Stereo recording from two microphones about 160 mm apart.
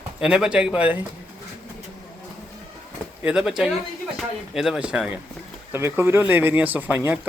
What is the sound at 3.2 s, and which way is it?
Speech, 5° right (ahead or behind).